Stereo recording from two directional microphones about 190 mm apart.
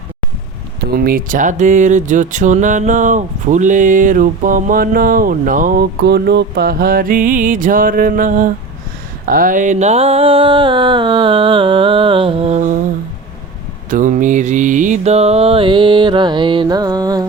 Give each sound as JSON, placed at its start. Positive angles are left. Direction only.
{"t": 0.9, "sound": "speech", "side_deg": -50}
{"t": 9.2, "sound": "a sound", "side_deg": -45}
{"t": 13.9, "sound": "mantra", "side_deg": -40}